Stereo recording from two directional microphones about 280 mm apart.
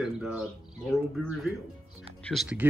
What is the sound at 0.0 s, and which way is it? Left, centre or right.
Speech, centre.